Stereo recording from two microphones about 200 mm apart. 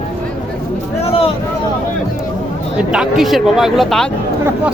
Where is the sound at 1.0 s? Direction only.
30° left (ahead or behind).